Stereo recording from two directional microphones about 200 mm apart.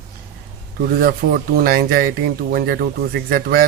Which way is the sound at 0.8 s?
50° right (ahead or behind).